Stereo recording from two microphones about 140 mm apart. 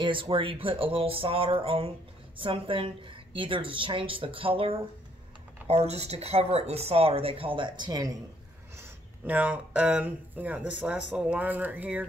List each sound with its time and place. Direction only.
0.0 s a woman's voice: 35° right (ahead or behind)
8.7 s speech: 10° right (ahead or behind)